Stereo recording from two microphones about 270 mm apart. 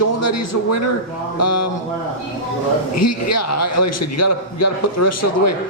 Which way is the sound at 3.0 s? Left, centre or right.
Left.